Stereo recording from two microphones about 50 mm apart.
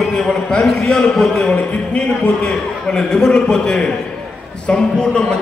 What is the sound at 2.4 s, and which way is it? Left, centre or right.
A man's voice, centre.